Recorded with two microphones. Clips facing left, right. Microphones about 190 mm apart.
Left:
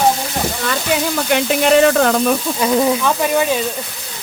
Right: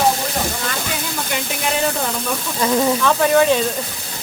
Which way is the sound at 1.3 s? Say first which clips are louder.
Left 11 dB; 80° left.